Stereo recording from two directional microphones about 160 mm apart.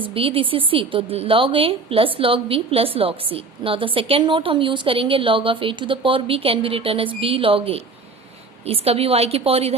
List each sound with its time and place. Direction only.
0.1 s a woman's voice: 35° right (ahead or behind)